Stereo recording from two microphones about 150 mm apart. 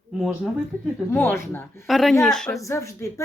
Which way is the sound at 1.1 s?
15° left (ahead or behind).